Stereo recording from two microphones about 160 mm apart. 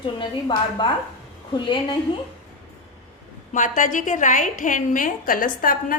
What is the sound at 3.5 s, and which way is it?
A woman's voice, 50° left (ahead or behind).